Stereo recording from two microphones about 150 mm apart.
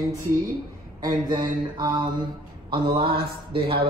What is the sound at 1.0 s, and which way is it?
Mantra, 30° right (ahead or behind).